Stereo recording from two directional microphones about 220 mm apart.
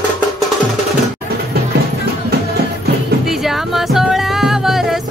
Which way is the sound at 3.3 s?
Centre (ahead or behind).